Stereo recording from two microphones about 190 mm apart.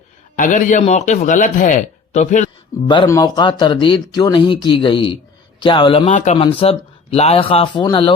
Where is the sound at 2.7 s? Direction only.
20° left (ahead or behind).